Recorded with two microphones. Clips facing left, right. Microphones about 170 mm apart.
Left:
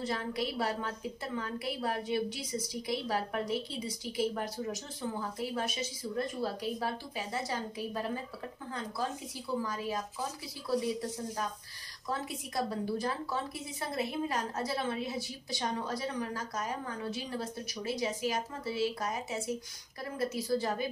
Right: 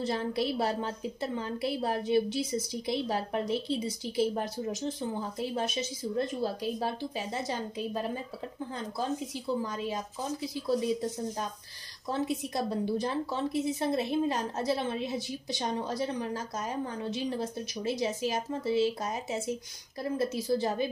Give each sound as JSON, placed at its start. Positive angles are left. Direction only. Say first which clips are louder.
{"t": 0.0, "sound": "a woman's voice", "louder": "right 4 dB", "side_deg": -30}
{"t": 9.6, "sound": "a woman's voice", "louder": "right 2 dB", "side_deg": -20}
{"t": 12.1, "sound": "a woman's voice", "louder": "right 6 dB", "side_deg": -25}